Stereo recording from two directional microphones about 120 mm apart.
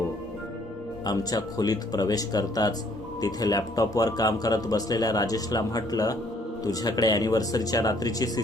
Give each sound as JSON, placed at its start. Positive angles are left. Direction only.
{"t": 1.0, "sound": "speech", "side_deg": 30}